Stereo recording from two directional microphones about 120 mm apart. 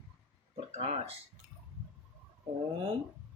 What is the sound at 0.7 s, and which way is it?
Speech, 65° right (ahead or behind).